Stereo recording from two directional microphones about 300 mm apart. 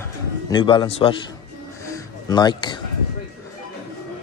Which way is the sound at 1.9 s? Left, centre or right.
Centre.